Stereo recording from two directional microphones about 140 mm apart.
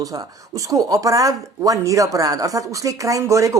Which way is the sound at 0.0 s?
25° right (ahead or behind).